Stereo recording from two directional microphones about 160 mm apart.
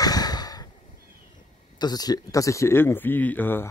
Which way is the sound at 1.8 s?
25° left (ahead or behind).